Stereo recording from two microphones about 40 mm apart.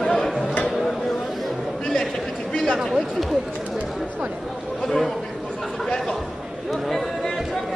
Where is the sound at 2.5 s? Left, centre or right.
Centre.